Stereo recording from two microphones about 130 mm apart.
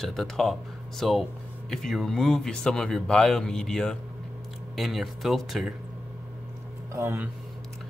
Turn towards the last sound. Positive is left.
turn(degrees=-25)  # may be behind; listen again after turning